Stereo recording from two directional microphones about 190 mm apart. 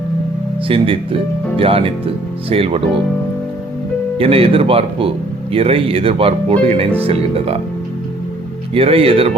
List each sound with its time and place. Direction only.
0.7 s speech: 30° right (ahead or behind)
4.2 s speech: 30° right (ahead or behind)
8.7 s speech: 30° right (ahead or behind)